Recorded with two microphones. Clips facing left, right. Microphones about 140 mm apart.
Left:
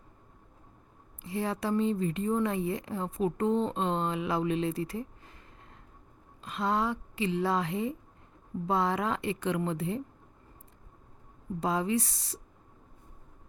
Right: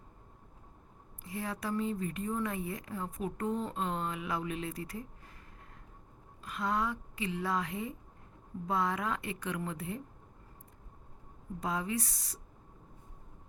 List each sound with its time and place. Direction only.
1.2 s speech: 30° left (ahead or behind)
6.4 s a woman's voice: 25° left (ahead or behind)
11.6 s speech: 30° left (ahead or behind)